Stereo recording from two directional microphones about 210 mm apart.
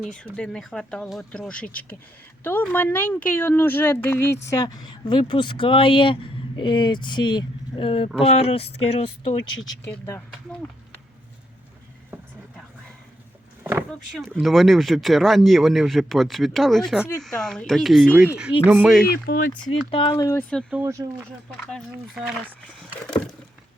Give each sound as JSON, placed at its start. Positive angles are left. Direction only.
{"t": 0.0, "sound": "speech", "side_deg": 0}
{"t": 9.8, "sound": "speech", "side_deg": 10}
{"t": 12.1, "sound": "vehicle", "side_deg": -10}
{"t": 14.3, "sound": "speech", "side_deg": -5}
{"t": 19.3, "sound": "speech", "side_deg": 40}
{"t": 19.9, "sound": "speech", "side_deg": 20}
{"t": 20.5, "sound": "speech", "side_deg": 5}
{"t": 20.7, "sound": "speech", "side_deg": -10}
{"t": 21.5, "sound": "speech", "side_deg": 0}